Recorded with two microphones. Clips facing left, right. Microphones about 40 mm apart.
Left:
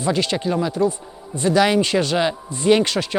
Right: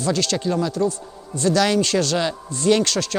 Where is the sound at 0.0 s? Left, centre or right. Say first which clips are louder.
Left 1 dB; centre.